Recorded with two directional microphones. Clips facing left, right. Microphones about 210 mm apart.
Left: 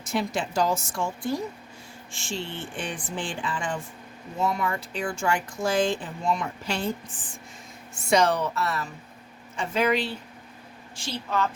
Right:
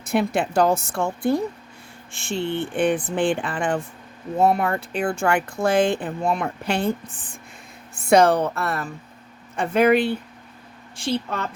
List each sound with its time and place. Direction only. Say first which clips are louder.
0.0 s speech: right 6 dB; 60° right (ahead or behind)
7.9 s speech: right 6 dB; 55° right (ahead or behind)